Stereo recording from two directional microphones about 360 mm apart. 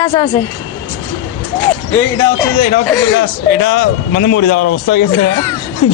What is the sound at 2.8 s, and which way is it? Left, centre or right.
Speech, centre.